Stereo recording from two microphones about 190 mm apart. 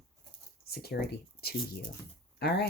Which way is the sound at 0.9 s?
55° left (ahead or behind).